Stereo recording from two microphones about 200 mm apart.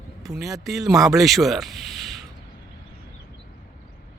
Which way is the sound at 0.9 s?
15° right (ahead or behind).